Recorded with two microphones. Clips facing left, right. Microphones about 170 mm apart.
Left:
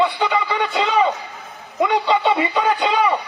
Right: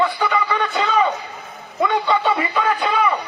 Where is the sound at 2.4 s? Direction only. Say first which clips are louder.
Left 2 dB; 25° left (ahead or behind).